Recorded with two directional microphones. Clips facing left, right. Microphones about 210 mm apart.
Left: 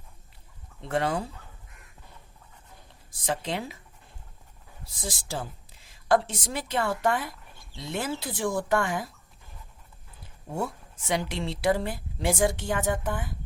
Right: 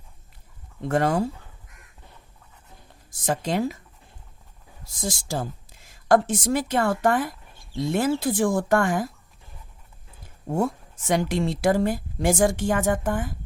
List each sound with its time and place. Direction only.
0.8 s a woman's voice: 45° right (ahead or behind)
3.1 s a woman's voice: 45° right (ahead or behind)
4.9 s a woman's voice: 45° right (ahead or behind)
10.5 s a woman's voice: 45° right (ahead or behind)